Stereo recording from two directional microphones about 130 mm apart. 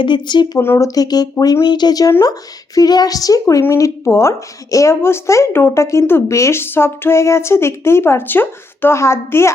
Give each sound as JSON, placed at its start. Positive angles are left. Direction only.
{"t": 0.0, "sound": "speech", "side_deg": 35}
{"t": 0.6, "sound": "a woman's voice", "side_deg": 20}